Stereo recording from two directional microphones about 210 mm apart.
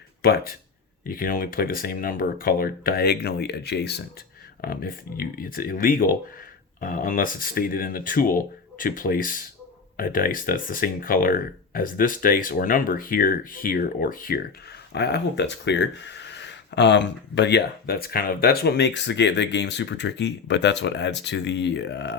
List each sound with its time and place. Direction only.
0.2 s speech: 45° left (ahead or behind)